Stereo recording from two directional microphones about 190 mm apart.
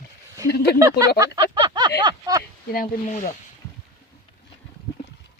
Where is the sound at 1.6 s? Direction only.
25° right (ahead or behind).